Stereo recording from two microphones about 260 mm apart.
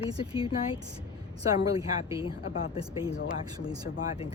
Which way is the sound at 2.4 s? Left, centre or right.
Left.